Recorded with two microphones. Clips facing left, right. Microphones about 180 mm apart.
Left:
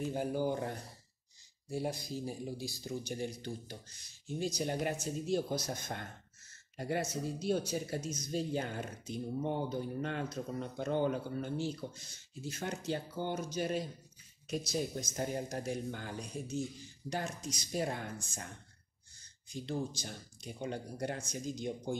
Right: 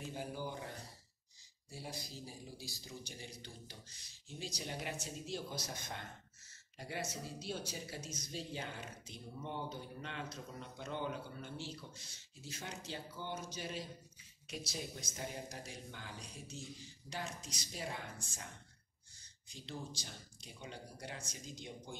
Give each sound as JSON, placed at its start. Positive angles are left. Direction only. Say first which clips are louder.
{"t": 0.0, "sound": "speech", "louder": "left 10 dB", "side_deg": 50}
{"t": 19.5, "sound": "speech", "louder": "left 10 dB", "side_deg": 45}